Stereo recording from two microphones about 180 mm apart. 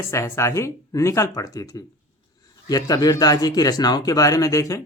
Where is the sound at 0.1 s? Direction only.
15° left (ahead or behind).